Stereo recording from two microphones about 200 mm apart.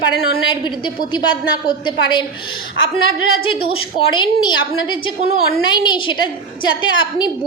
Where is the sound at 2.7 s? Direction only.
75° left (ahead or behind).